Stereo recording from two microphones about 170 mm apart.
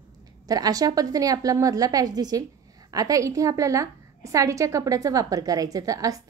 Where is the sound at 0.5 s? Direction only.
20° right (ahead or behind).